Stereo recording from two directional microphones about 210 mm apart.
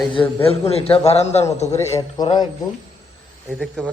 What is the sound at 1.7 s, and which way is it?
Speech, 15° left (ahead or behind).